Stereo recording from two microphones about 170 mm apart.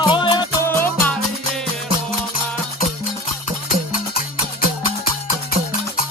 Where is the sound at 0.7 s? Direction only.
15° left (ahead or behind).